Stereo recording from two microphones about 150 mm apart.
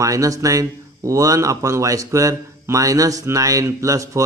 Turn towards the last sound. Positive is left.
turn(degrees=-20)  # may be behind; listen again after turning